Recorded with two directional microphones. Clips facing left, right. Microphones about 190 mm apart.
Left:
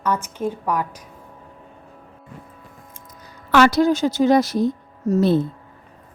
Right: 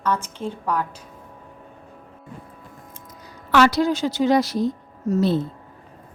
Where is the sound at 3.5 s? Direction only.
50° left (ahead or behind).